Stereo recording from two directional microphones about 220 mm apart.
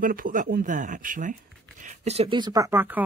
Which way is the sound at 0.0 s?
40° right (ahead or behind).